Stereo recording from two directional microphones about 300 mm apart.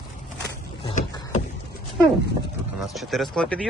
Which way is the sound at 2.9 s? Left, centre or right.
Centre.